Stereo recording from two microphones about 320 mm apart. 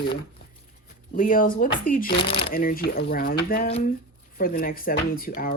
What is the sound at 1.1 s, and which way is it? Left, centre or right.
Speech, left.